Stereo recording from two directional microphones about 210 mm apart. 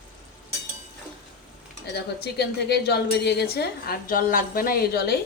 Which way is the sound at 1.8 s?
50° left (ahead or behind).